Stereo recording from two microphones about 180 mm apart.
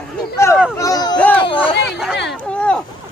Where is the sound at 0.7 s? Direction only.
20° left (ahead or behind).